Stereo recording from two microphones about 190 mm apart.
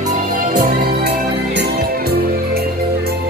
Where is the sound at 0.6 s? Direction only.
60° right (ahead or behind).